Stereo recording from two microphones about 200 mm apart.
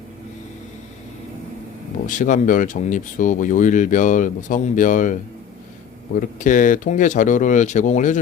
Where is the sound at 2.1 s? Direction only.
40° left (ahead or behind).